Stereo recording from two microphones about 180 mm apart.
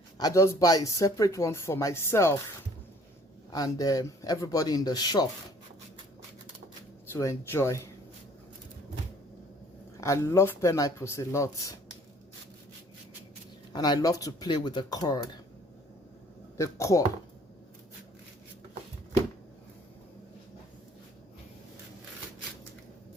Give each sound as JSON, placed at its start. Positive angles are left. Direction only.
{"t": 0.2, "sound": "speech", "side_deg": 20}
{"t": 3.5, "sound": "speech", "side_deg": 20}
{"t": 7.1, "sound": "speech", "side_deg": 15}
{"t": 10.0, "sound": "speech", "side_deg": 15}
{"t": 13.7, "sound": "speech", "side_deg": 25}
{"t": 16.6, "sound": "speech", "side_deg": 15}